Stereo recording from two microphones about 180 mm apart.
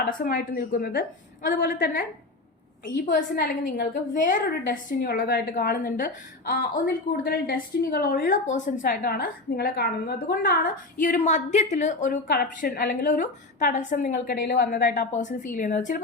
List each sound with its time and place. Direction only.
0.0 s a woman's voice: 50° left (ahead or behind)